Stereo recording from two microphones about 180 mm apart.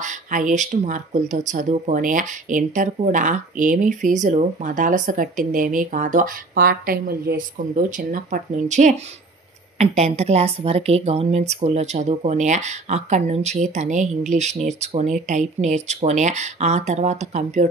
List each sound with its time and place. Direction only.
0.0 s a woman's voice: 45° right (ahead or behind)